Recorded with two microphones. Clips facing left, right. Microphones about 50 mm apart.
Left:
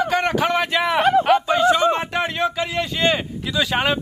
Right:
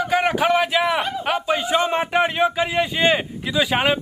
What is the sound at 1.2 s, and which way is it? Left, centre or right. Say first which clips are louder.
Speech: left 6 dB; centre.